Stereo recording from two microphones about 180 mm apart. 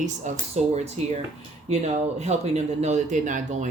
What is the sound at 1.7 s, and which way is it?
Speech, 35° right (ahead or behind).